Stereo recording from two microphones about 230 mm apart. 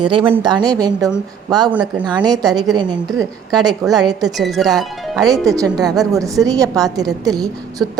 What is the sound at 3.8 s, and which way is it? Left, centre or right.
Speech, centre.